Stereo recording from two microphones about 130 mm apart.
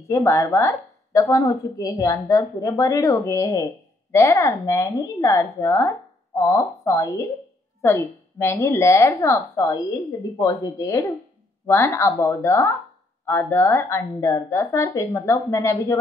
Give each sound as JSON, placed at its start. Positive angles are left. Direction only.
{"t": 0.1, "sound": "speech", "side_deg": 25}